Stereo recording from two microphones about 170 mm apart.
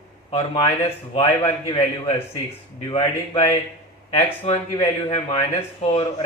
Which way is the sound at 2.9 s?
35° left (ahead or behind).